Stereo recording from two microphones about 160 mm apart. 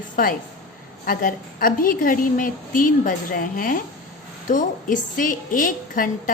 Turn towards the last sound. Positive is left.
turn(degrees=55)  # may be behind; listen again after turning